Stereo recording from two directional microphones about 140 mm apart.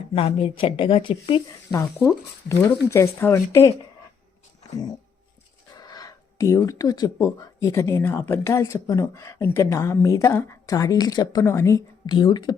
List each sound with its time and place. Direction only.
0.1 s a woman's voice: 45° left (ahead or behind)
1.8 s speech: 15° left (ahead or behind)
5.7 s a sound: 30° left (ahead or behind)
6.7 s speech: 25° left (ahead or behind)
12.0 s speech: 35° left (ahead or behind)